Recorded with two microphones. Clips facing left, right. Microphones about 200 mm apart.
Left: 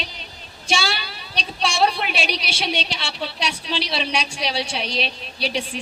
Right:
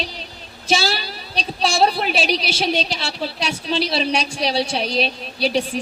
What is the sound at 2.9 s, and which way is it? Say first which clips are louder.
A woman's voice: right 3 dB; 40° right (ahead or behind).